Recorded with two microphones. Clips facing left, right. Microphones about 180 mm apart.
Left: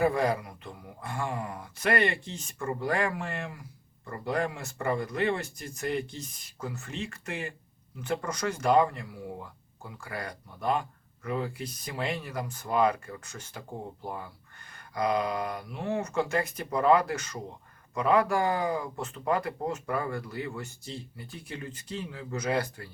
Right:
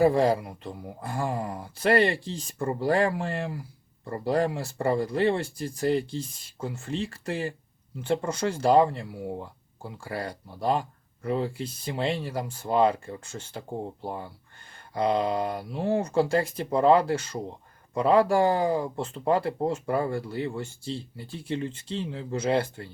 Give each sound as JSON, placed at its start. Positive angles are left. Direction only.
{"t": 0.0, "sound": "speech", "side_deg": -30}